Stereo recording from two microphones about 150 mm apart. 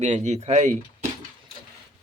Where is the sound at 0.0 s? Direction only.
50° right (ahead or behind).